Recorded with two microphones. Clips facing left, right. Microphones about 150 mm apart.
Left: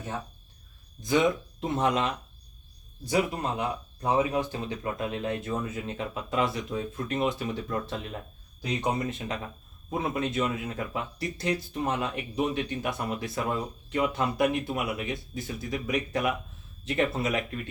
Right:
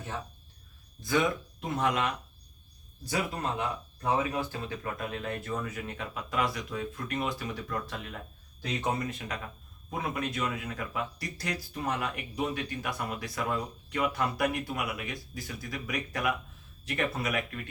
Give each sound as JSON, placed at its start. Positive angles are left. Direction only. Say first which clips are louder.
{"t": 1.0, "sound": "speech", "louder": "left 4 dB", "side_deg": 20}